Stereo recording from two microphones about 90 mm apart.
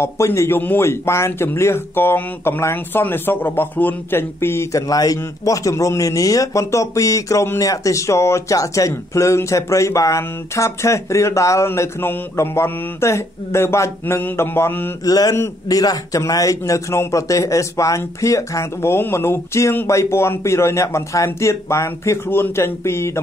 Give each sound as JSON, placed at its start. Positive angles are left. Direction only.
{"t": 0.0, "sound": "a man's voice", "side_deg": 30}
{"t": 4.8, "sound": "a man's voice", "side_deg": 45}
{"t": 15.0, "sound": "mantra", "side_deg": 40}
{"t": 15.7, "sound": "a man's voice", "side_deg": 45}